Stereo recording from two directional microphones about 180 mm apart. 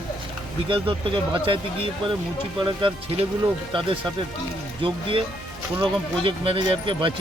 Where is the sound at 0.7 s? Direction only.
30° right (ahead or behind).